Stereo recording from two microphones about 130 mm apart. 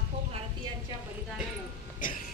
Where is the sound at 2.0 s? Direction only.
90° left.